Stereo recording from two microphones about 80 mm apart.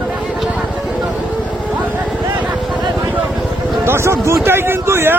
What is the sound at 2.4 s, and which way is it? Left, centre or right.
Vehicle, centre.